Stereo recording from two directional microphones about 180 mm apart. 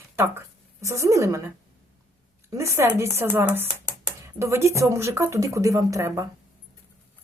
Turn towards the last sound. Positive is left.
turn(degrees=-20)  # may be behind; listen again after turning